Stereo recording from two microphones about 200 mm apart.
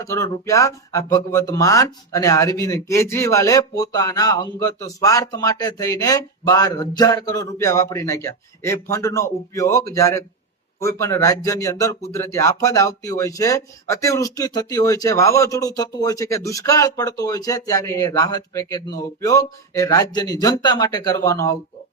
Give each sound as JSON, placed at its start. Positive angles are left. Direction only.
{"t": 0.0, "sound": "speech", "side_deg": 15}